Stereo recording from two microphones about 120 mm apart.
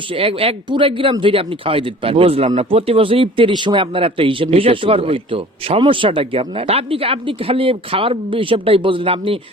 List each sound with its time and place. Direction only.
0.1 s speech: 50° right (ahead or behind)